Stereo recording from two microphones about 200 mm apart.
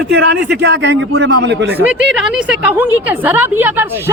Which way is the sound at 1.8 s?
5° right (ahead or behind).